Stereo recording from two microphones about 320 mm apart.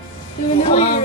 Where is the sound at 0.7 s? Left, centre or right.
Left.